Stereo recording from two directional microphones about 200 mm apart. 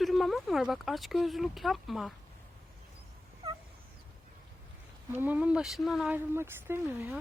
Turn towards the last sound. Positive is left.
turn(degrees=-10)  # may be behind; listen again after turning